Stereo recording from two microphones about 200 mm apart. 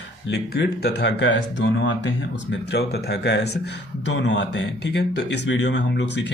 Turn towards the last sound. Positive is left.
turn(degrees=65)  # may be behind; listen again after turning